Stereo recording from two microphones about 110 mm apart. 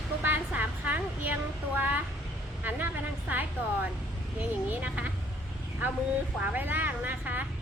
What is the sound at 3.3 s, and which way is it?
A woman's voice, 15° right (ahead or behind).